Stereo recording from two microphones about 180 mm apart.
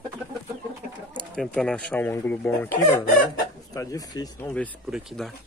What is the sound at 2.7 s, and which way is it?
Chicken, 45° left (ahead or behind).